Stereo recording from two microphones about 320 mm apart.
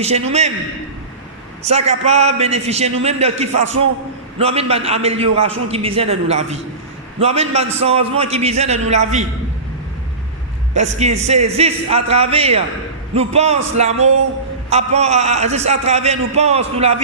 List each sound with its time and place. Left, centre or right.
0.0 s a man's voice: centre
1.6 s a man's voice: centre
10.8 s a man's voice: right